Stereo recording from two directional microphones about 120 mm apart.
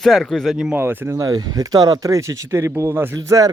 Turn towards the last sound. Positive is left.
turn(degrees=-25)  # may be behind; listen again after turning